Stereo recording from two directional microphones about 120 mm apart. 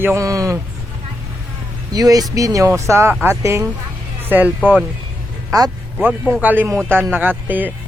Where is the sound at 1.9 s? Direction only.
30° right (ahead or behind); by 4.5 s 15° right (ahead or behind).